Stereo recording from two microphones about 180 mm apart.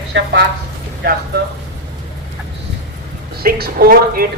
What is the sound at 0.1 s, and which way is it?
Speech, 90° right.